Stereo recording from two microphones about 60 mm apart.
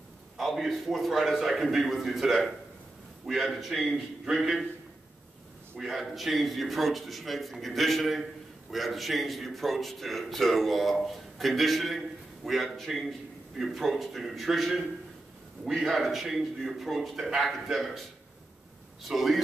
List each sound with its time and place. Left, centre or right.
0.4 s a man's voice: centre
5.8 s a man's voice: centre
19.0 s a man's voice: centre